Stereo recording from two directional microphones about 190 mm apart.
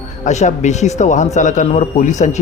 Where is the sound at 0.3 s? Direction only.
40° left (ahead or behind).